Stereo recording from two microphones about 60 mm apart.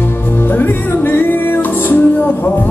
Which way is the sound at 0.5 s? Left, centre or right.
Left.